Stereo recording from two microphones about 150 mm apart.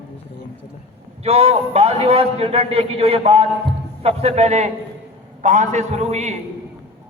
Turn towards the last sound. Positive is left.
turn(degrees=-50)  # may be behind; listen again after turning